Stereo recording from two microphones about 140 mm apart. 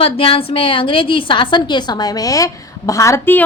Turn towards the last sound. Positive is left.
turn(degrees=20)  # may be behind; listen again after turning